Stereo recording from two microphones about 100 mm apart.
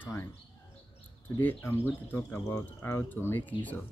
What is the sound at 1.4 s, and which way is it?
Speech, 20° left (ahead or behind).